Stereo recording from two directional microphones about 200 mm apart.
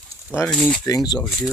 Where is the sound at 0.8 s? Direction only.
20° left (ahead or behind).